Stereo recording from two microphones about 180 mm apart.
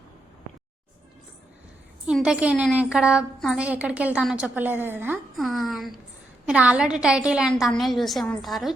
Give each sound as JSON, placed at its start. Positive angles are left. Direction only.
{"t": 2.0, "sound": "a woman's voice", "side_deg": -5}
{"t": 5.4, "sound": "a woman's voice", "side_deg": 0}